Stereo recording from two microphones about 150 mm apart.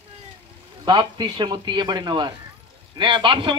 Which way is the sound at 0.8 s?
30° right (ahead or behind).